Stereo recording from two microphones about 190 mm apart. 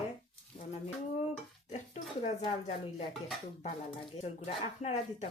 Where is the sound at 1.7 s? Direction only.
35° left (ahead or behind).